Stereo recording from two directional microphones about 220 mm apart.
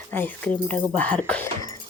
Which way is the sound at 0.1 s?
10° left (ahead or behind).